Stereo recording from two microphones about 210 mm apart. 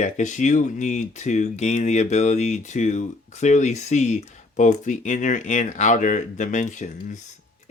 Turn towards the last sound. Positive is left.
turn(degrees=35)  # may be behind; listen again after turning